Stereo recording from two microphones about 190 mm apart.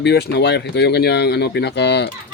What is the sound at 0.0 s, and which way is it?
Speech, 60° left (ahead or behind).